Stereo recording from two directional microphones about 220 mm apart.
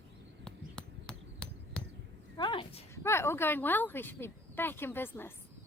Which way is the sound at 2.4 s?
25° left (ahead or behind).